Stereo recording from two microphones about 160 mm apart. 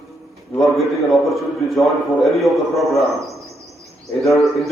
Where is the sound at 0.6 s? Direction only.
Centre (ahead or behind).